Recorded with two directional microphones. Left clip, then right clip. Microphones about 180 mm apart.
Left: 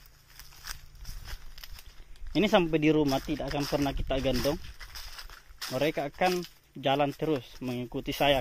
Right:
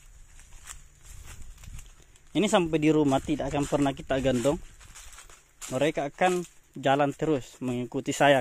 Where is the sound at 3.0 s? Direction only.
20° right (ahead or behind).